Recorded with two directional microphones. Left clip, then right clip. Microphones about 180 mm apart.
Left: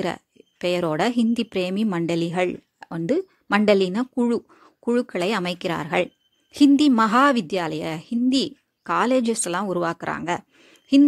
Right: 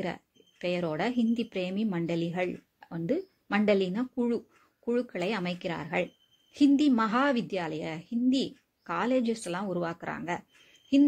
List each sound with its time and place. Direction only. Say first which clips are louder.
0.0 s a woman's voice: left 8 dB; 40° left (ahead or behind)